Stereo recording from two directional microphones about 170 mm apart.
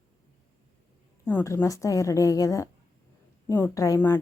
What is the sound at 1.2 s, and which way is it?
A woman's voice, 15° left (ahead or behind).